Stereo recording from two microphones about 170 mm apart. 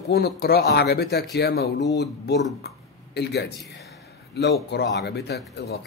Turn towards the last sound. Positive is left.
turn(degrees=70)  # may be behind; listen again after turning